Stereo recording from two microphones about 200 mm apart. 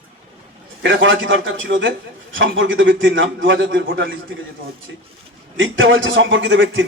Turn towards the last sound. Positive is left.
turn(degrees=-70)  # may be behind; listen again after turning